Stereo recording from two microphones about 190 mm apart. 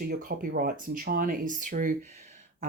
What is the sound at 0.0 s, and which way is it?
Speech, 50° right (ahead or behind).